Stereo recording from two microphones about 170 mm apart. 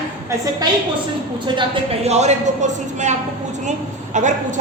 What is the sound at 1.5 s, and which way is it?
A woman's voice, 35° right (ahead or behind).